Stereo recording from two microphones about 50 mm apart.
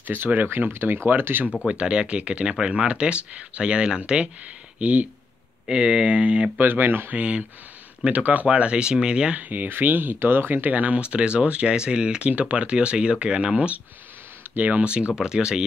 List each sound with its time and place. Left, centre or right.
0.0 s speech: right
0.7 s speech: right
1.7 s speech: right
6.6 s speech: right
7.1 s speech: right
9.4 s speech: right; by 12.3 s centre
12.3 s speech: right
15.1 s speech: centre